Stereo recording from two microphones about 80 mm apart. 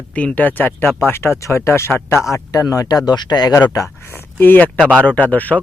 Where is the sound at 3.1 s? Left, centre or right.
Left.